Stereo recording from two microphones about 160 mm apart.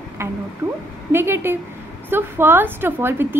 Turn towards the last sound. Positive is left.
turn(degrees=-15)  # may be behind; listen again after turning